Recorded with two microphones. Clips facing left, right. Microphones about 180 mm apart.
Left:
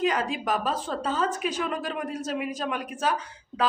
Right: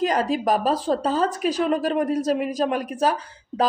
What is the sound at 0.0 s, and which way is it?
Speech, 40° right (ahead or behind).